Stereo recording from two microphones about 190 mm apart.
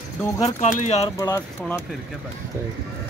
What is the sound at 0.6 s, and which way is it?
Speech, 35° left (ahead or behind).